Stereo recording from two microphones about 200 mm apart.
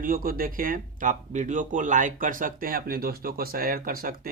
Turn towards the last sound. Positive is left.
turn(degrees=-45)  # may be behind; listen again after turning